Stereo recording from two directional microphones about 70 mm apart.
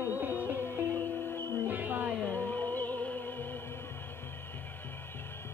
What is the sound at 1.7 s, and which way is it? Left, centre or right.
Music, right.